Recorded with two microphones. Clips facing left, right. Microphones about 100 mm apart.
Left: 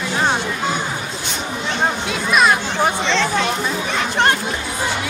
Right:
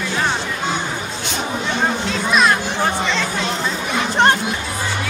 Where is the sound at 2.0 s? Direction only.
10° left (ahead or behind).